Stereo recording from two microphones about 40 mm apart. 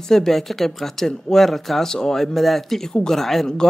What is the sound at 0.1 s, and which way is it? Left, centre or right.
Speech, centre.